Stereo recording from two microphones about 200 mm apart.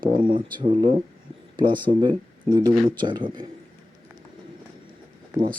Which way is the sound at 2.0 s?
20° right (ahead or behind).